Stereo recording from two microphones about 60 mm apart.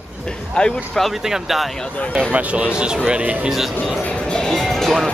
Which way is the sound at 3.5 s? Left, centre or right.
Centre.